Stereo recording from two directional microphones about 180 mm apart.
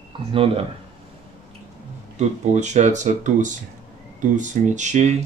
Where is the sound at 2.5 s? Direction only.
40° right (ahead or behind).